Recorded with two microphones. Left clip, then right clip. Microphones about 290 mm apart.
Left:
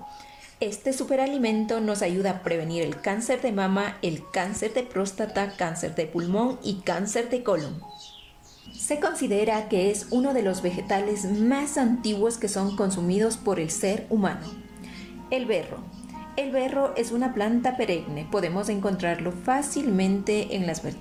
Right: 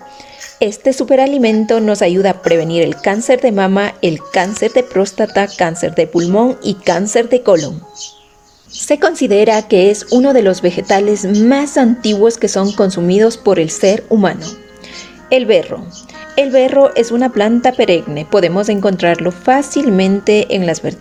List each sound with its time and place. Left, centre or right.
0.6 s a woman's voice: right
8.9 s a woman's voice: right